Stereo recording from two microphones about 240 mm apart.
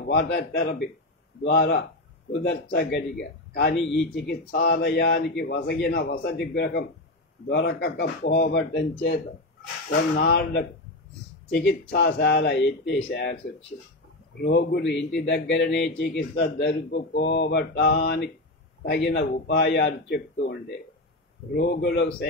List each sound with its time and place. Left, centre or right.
0.1 s speech: left
14.4 s speech: left